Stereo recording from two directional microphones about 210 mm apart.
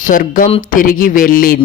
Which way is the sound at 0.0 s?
40° left (ahead or behind).